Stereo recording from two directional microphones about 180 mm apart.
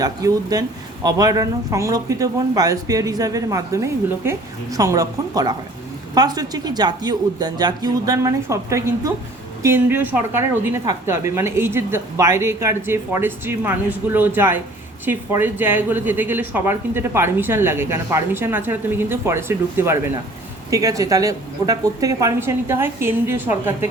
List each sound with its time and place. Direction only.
0.0 s speech: 20° right (ahead or behind)